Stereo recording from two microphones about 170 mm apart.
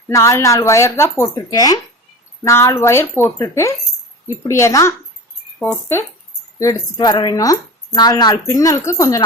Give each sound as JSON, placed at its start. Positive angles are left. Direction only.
{"t": 0.1, "sound": "speech", "side_deg": 15}
{"t": 6.6, "sound": "speech", "side_deg": 20}